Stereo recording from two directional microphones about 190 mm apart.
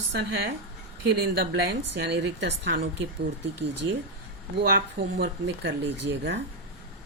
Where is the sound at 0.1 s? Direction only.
65° right (ahead or behind).